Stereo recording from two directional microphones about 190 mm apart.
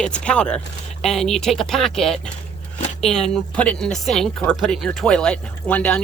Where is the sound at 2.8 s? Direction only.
35° left (ahead or behind).